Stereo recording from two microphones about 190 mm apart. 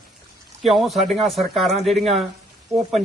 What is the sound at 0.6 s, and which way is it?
A man's voice, centre (ahead or behind).